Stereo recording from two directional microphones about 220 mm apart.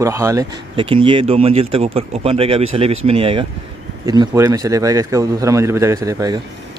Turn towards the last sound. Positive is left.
turn(degrees=-15)  # may be behind; listen again after turning